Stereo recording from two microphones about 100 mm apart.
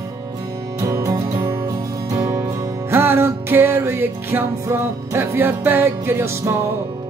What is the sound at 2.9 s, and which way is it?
Music, 25° right (ahead or behind).